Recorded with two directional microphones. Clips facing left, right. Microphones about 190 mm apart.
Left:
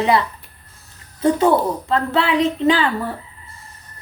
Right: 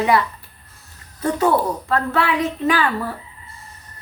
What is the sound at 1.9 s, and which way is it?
Speech, 25° left (ahead or behind).